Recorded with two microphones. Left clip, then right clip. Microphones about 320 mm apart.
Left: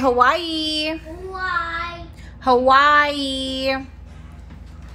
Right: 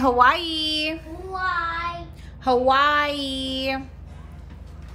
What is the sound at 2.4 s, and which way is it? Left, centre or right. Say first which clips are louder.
Child singing: left 4 dB; centre.